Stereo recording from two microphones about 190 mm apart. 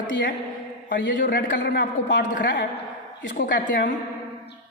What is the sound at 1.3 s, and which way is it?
Speech, 45° left (ahead or behind).